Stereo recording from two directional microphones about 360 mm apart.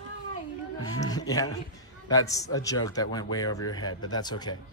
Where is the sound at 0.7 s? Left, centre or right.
Centre.